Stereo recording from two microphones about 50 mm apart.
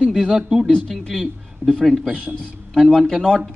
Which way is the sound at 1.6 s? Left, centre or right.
Right.